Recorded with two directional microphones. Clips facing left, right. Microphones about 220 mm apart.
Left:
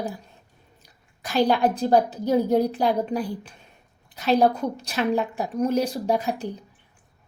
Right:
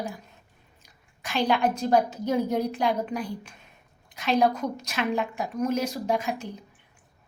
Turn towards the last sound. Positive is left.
turn(degrees=35)  # may be behind; listen again after turning